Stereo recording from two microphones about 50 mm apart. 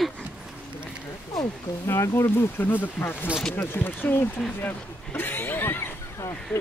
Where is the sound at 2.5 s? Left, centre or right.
Left.